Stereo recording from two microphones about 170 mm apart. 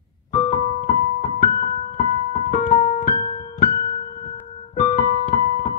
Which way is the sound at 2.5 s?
50° left (ahead or behind).